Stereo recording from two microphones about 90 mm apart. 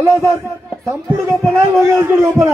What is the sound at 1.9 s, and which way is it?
Speech, 25° right (ahead or behind).